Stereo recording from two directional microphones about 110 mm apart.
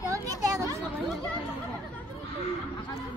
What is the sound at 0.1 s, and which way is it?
Children playing, 30° right (ahead or behind).